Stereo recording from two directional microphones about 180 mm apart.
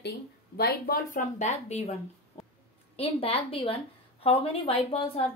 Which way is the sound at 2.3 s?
30° left (ahead or behind).